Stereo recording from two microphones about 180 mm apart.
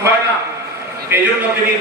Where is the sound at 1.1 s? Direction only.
10° right (ahead or behind).